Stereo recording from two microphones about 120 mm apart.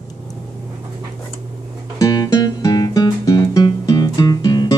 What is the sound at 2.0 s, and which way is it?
Music, 30° left (ahead or behind).